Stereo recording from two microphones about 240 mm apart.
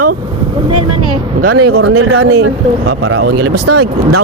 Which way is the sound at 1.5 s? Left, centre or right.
Right.